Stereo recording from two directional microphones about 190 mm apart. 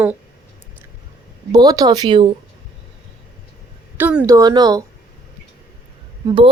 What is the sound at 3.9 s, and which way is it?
Speech, 10° right (ahead or behind).